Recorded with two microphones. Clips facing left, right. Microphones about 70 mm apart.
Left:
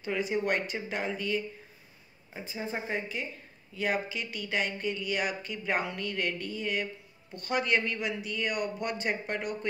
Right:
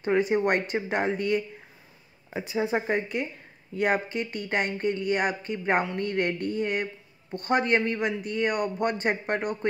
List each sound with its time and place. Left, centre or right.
0.0 s speech: right
2.3 s speech: right